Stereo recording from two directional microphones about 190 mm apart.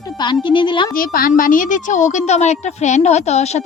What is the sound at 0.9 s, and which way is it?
A woman's voice, 50° left (ahead or behind).